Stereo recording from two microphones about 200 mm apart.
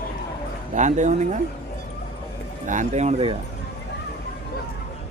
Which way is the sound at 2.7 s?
35° right (ahead or behind).